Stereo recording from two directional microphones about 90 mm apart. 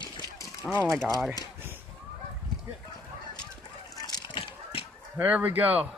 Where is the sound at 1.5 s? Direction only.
25° right (ahead or behind).